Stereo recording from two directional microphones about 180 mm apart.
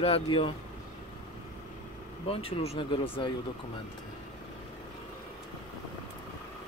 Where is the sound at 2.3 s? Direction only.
30° left (ahead or behind).